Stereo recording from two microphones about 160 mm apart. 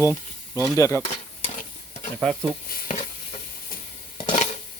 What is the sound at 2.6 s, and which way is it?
Stir, 60° left (ahead or behind).